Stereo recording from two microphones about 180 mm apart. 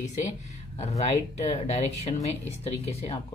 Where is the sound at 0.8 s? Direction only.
40° left (ahead or behind).